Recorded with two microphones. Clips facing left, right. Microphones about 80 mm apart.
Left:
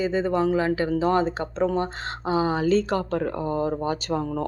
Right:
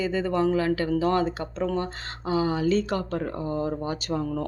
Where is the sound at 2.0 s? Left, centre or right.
Left.